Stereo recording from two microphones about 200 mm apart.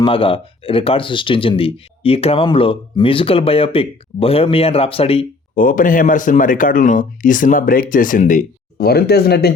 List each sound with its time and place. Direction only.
0.0 s speech: 25° left (ahead or behind)
5.5 s speech: 40° left (ahead or behind)